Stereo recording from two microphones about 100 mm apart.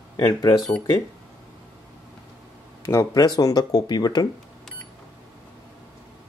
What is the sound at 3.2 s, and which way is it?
Speech, 40° left (ahead or behind).